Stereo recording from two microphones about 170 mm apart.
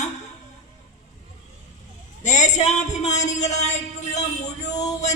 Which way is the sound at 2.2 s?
45° left (ahead or behind).